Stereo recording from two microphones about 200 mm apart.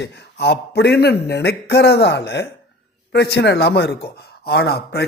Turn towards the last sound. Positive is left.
turn(degrees=55)  # may be behind; listen again after turning